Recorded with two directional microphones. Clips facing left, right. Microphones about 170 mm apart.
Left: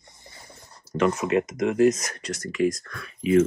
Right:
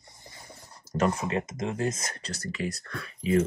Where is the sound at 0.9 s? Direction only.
35° right (ahead or behind).